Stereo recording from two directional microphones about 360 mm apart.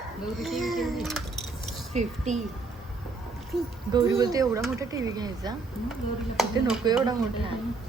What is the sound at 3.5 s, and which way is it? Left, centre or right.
Speech, centre.